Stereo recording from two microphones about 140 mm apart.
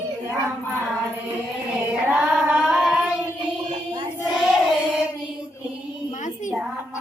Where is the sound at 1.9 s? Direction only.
10° right (ahead or behind).